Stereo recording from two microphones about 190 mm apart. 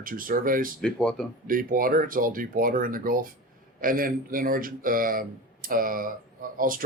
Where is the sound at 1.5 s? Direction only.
45° right (ahead or behind).